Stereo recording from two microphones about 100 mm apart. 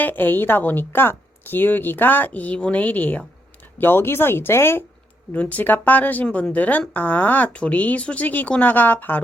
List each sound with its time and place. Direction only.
0.0 s a woman's voice: 20° left (ahead or behind)